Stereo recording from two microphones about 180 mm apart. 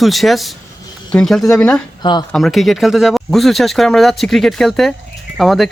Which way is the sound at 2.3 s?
Centre (ahead or behind).